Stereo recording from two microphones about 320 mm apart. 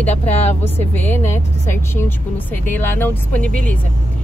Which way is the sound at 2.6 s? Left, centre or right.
Centre.